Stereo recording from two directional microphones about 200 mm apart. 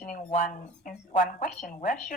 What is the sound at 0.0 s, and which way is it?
A woman's voice, 40° left (ahead or behind).